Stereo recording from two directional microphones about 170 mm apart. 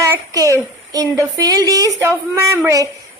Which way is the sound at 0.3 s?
20° right (ahead or behind).